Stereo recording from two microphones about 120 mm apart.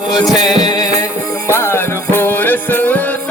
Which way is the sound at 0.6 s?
35° left (ahead or behind).